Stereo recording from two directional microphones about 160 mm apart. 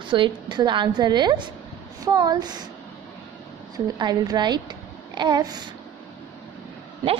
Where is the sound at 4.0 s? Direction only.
25° right (ahead or behind).